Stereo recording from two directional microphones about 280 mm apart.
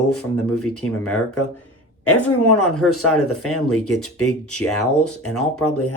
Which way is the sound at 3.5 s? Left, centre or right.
Left.